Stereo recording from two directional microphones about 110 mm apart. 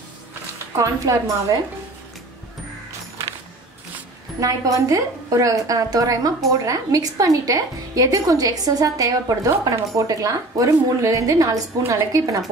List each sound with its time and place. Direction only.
0.7 s a woman's voice: 30° right (ahead or behind)
4.4 s a woman's voice: 30° right (ahead or behind)